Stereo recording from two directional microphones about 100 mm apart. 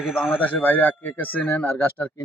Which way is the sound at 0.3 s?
15° left (ahead or behind).